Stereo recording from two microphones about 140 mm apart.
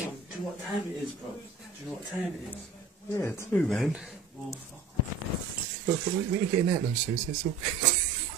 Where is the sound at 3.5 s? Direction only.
5° left (ahead or behind).